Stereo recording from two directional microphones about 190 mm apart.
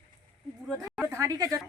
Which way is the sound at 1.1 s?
15° right (ahead or behind).